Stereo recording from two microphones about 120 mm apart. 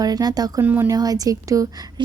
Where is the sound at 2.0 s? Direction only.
40° right (ahead or behind).